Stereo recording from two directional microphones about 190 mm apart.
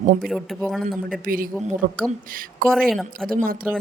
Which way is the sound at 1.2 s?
50° right (ahead or behind).